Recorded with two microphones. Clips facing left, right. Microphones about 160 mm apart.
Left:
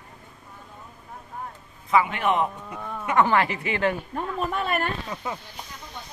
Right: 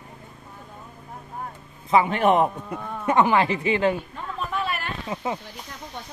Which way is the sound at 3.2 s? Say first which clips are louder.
Right 1 dB; 20° right (ahead or behind).